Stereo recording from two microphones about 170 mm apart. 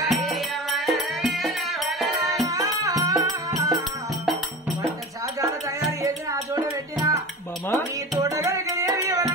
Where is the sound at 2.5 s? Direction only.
20° right (ahead or behind).